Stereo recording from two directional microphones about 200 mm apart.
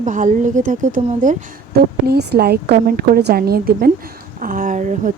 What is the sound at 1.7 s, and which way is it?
A woman's voice, 50° right (ahead or behind).